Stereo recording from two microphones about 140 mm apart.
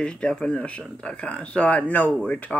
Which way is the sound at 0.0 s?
5° left (ahead or behind).